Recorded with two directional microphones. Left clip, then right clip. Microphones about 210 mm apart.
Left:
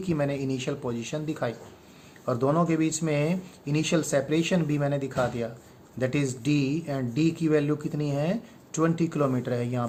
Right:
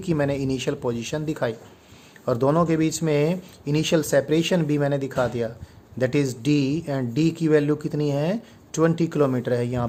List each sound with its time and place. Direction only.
0.0 s speech: 45° right (ahead or behind)